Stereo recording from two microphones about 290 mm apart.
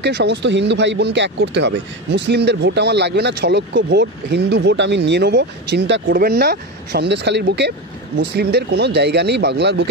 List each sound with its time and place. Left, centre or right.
0.0 s speech: right